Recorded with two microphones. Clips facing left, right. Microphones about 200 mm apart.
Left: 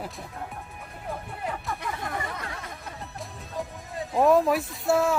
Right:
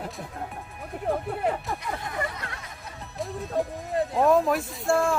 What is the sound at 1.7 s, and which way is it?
Music, 55° left (ahead or behind).